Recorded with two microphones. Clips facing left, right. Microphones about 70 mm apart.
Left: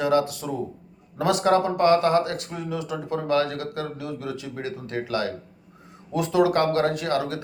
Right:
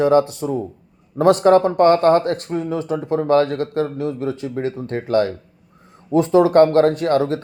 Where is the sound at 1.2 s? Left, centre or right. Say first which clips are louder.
Right 8 dB; right.